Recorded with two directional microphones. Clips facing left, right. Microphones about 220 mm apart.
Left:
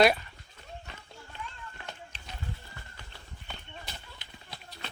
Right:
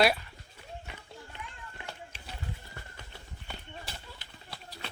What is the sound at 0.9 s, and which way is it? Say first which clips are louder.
Run: right 2 dB; 15° right (ahead or behind).